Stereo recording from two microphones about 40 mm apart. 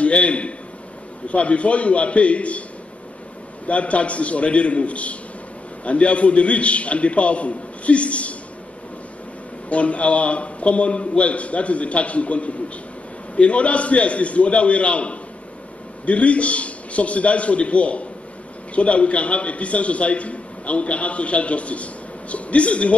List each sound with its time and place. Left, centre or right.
0.0 s a man's voice: left
3.6 s a man's voice: left
9.7 s a man's voice: left